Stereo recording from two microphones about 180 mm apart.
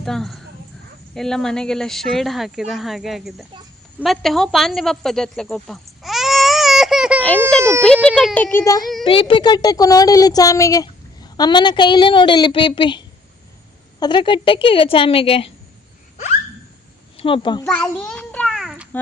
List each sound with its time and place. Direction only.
0.0 s speech: centre (ahead or behind)
7.2 s a sound: 10° left (ahead or behind)
8.0 s speech: 5° left (ahead or behind)
9.0 s speech: 30° left (ahead or behind)
17.2 s a child's voice: 30° left (ahead or behind)
17.6 s a sound: 5° left (ahead or behind)